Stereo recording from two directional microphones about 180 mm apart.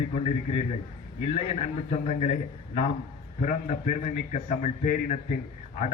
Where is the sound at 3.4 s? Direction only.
45° left (ahead or behind).